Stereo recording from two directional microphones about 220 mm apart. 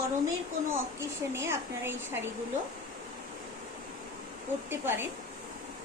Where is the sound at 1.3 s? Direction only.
10° right (ahead or behind).